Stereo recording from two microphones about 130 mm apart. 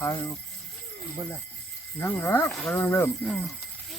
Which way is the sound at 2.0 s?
15° left (ahead or behind).